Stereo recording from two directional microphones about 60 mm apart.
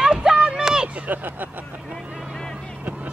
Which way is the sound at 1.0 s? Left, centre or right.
Right.